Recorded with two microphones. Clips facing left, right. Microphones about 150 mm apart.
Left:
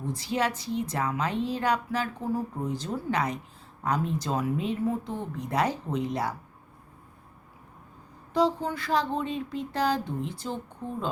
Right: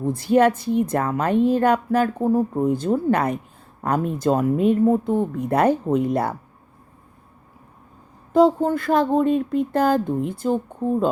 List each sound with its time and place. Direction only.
0.0 s a woman's voice: 55° right (ahead or behind)
8.3 s a woman's voice: 50° right (ahead or behind)